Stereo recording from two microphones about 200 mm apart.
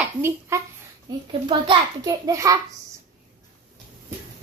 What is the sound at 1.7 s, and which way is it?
Speech, 20° right (ahead or behind).